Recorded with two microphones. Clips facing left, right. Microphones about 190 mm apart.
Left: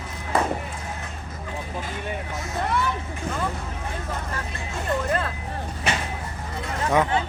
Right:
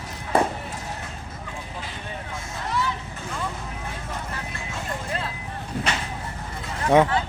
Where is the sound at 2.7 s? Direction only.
55° left (ahead or behind).